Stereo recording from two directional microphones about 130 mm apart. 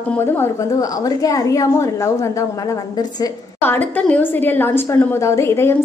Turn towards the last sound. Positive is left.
turn(degrees=20)  # may be behind; listen again after turning